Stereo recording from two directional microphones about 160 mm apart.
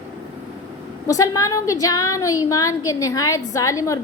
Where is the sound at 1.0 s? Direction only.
20° left (ahead or behind).